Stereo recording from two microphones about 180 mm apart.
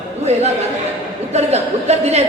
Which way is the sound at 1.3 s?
35° right (ahead or behind).